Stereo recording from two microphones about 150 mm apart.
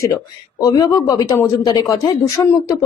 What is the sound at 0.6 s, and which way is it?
Speech, 25° left (ahead or behind).